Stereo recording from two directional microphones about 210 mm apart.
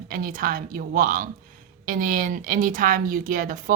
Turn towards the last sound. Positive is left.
turn(degrees=-40)  # may be behind; listen again after turning